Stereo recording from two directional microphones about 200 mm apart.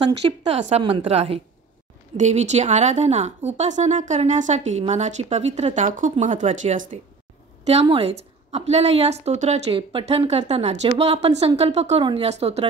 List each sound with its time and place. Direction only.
0.0 s a woman's voice: 30° right (ahead or behind)
7.8 s a woman's voice: 30° right (ahead or behind)